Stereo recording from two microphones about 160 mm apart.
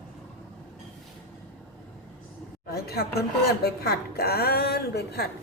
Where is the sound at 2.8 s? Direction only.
75° left (ahead or behind).